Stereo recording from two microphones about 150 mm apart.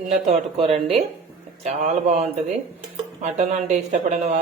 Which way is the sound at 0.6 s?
40° right (ahead or behind).